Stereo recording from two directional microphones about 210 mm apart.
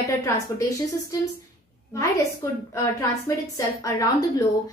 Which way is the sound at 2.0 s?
15° left (ahead or behind).